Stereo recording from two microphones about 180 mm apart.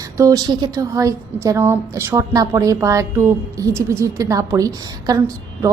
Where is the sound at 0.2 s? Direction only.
20° right (ahead or behind).